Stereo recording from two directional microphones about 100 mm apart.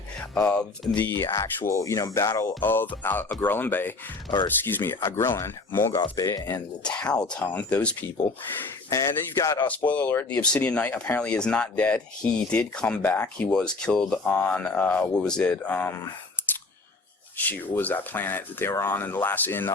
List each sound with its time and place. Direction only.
0.2 s speech: 15° left (ahead or behind)
0.9 s speech: 25° left (ahead or behind)
2.6 s speech: 20° left (ahead or behind); by 6.6 s 40° left (ahead or behind)
6.8 s speech: 10° left (ahead or behind)
8.9 s speech: 30° left (ahead or behind)
9.6 s speech: 15° left (ahead or behind)
17.3 s speech: 15° left (ahead or behind)